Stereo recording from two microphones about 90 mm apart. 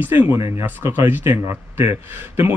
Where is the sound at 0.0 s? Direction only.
20° right (ahead or behind).